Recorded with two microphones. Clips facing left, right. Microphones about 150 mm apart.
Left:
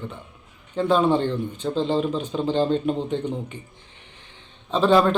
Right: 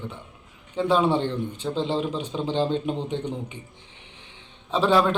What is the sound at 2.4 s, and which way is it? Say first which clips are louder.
Speech: left 3 dB; 15° right (ahead or behind).